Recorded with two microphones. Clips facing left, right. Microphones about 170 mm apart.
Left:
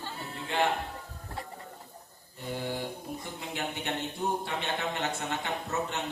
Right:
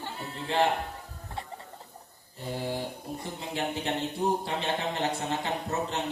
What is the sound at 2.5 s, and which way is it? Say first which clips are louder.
A man's voice: right 1 dB; 30° right (ahead or behind).